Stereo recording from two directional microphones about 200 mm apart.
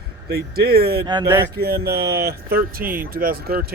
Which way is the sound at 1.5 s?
50° right (ahead or behind).